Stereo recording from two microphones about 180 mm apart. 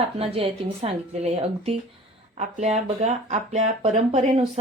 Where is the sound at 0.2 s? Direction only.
30° right (ahead or behind).